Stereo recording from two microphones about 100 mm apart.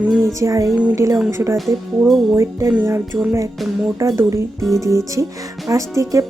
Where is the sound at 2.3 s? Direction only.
30° right (ahead or behind).